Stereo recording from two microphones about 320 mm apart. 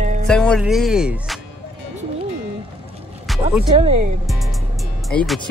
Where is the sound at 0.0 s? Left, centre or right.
Right.